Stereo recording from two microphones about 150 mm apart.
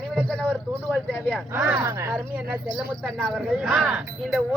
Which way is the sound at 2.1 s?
10° right (ahead or behind).